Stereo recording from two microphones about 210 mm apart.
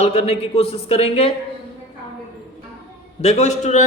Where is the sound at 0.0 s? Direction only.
30° left (ahead or behind).